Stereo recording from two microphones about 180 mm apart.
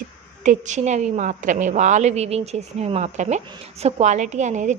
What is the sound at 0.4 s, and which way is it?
A woman's voice, 45° right (ahead or behind).